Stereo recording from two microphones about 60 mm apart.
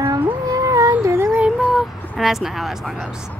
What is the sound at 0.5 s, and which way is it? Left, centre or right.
Music, right.